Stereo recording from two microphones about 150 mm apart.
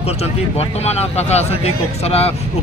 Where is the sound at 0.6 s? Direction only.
45° left (ahead or behind).